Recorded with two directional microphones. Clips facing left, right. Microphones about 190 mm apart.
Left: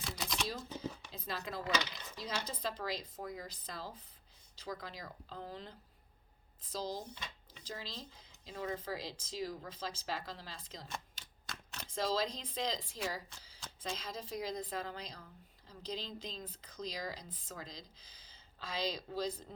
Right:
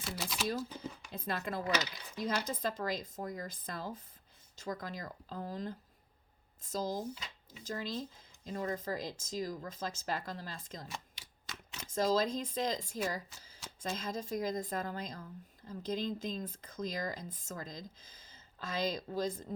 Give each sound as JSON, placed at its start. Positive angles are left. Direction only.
{"t": 0.0, "sound": "shuffling cards", "side_deg": -5}
{"t": 1.1, "sound": "speech", "side_deg": -55}
{"t": 10.8, "sound": "typewriter", "side_deg": -5}
{"t": 11.9, "sound": "speech", "side_deg": -45}